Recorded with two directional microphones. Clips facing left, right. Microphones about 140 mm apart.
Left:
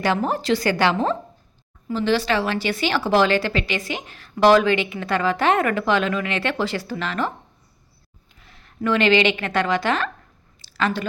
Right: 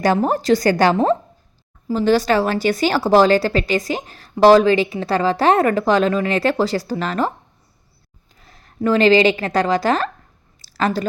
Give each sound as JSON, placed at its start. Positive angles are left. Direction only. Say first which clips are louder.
{"t": 0.0, "sound": "a woman's voice", "louder": "right 5 dB", "side_deg": -40}
{"t": 8.4, "sound": "a woman's voice", "louder": "right 5 dB", "side_deg": -40}
{"t": 10.6, "sound": "a sound", "louder": "right 3 dB", "side_deg": -40}